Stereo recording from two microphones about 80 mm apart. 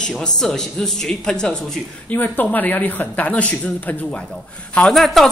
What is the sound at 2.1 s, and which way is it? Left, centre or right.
A man's voice, left.